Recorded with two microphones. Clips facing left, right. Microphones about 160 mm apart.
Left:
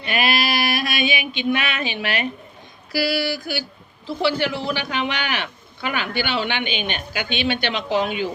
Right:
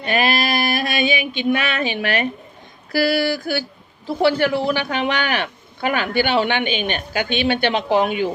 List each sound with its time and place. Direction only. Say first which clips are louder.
0.0 s mantra: right 3 dB; 45° right (ahead or behind)
1.1 s a man's voice: right 3 dB; 45° right (ahead or behind)